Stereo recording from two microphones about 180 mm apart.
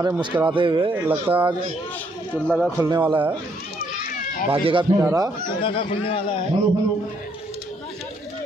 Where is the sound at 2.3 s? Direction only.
5° left (ahead or behind).